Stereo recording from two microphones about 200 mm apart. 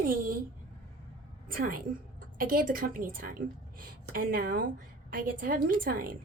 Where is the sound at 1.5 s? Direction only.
45° right (ahead or behind).